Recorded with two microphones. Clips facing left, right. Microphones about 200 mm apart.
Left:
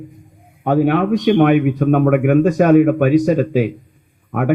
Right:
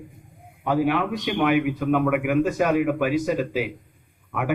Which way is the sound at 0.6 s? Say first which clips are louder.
Left 7 dB; 55° left (ahead or behind).